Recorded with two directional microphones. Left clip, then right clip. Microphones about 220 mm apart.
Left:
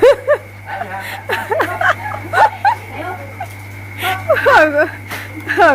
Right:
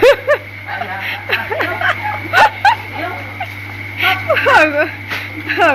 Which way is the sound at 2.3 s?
5° left (ahead or behind).